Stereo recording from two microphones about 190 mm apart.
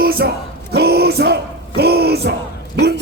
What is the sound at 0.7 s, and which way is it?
Speech, 60° right (ahead or behind).